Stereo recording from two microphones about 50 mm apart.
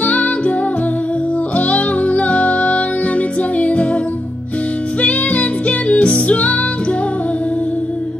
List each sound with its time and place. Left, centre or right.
0.0 s music: left
1.6 s music: left
5.0 s music: left